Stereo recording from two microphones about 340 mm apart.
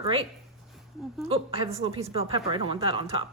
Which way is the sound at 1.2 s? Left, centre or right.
Centre.